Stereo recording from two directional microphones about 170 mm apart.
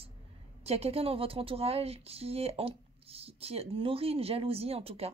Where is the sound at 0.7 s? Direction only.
35° right (ahead or behind).